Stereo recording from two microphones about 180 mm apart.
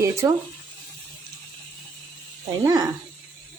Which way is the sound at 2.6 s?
15° right (ahead or behind).